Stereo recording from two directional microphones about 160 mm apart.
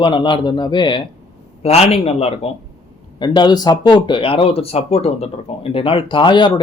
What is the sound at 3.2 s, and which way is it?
Speech, 25° left (ahead or behind).